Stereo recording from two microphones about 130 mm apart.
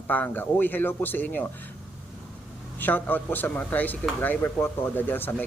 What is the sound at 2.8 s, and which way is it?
Speech, 15° left (ahead or behind).